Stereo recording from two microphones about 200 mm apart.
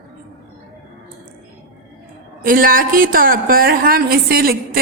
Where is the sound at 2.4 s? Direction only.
45° right (ahead or behind).